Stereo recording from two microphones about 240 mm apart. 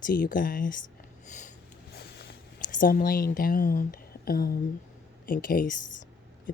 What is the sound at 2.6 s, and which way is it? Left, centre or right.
A woman's voice, left.